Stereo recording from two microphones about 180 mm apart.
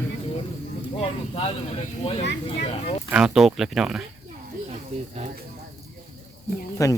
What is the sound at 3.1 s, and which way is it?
Speech, 5° right (ahead or behind).